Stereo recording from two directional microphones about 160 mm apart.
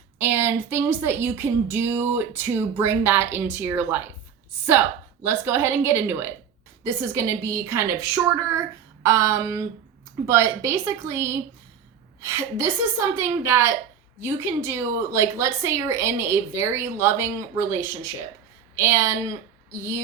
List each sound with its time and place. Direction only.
0.2 s a woman's voice: 15° right (ahead or behind)
5.2 s a woman's voice: 15° right (ahead or behind)
9.0 s a sound: 20° right (ahead or behind)
10.2 s a woman's voice: 15° right (ahead or behind)